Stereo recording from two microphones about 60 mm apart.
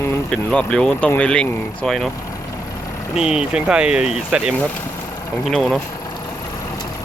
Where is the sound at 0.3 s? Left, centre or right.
Centre.